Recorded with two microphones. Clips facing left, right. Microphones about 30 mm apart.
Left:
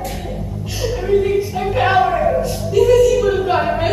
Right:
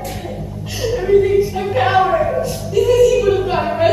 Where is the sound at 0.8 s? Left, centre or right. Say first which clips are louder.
Right 3 dB; centre.